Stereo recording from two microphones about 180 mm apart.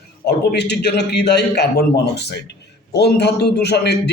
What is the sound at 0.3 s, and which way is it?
A man's voice, 65° left (ahead or behind).